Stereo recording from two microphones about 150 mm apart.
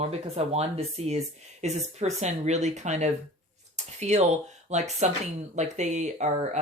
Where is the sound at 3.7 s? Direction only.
50° right (ahead or behind).